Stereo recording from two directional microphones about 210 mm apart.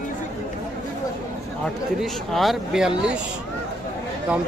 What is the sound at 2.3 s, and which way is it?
Speech, centre (ahead or behind).